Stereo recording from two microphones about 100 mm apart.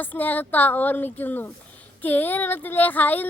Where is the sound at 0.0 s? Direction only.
15° left (ahead or behind).